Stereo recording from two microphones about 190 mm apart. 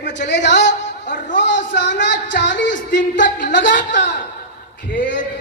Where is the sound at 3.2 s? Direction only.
45° left (ahead or behind).